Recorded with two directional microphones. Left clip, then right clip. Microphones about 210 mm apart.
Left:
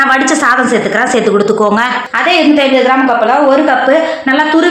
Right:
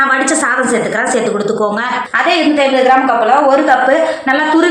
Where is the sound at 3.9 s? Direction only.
45° left (ahead or behind).